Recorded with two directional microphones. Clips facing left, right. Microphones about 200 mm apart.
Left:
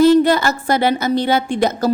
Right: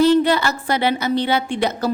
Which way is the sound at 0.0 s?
45° left (ahead or behind).